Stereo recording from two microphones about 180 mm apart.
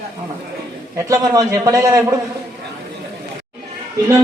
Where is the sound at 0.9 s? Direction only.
20° right (ahead or behind).